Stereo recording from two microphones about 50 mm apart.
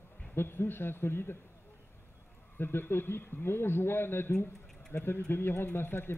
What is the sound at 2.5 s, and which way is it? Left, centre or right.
A man's voice, left.